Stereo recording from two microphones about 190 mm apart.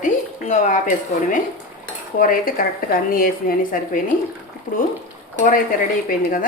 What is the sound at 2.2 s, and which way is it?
A woman's voice, 45° left (ahead or behind).